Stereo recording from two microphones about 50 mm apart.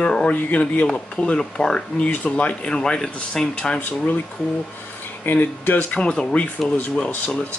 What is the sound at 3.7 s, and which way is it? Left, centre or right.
Speech, left.